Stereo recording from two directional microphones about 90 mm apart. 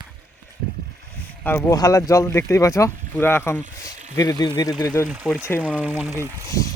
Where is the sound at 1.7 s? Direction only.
40° left (ahead or behind).